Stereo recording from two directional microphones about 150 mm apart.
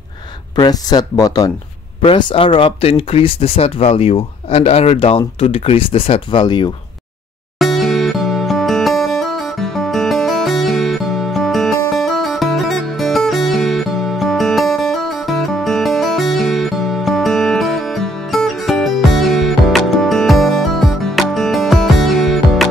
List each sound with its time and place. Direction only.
0.6 s speech: 25° left (ahead or behind)
2.0 s speech: 35° left (ahead or behind)
7.5 s music: centre (ahead or behind)